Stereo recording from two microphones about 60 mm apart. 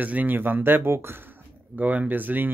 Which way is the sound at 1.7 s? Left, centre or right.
Right.